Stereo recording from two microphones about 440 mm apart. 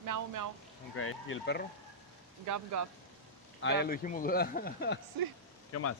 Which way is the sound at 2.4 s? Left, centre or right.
Right.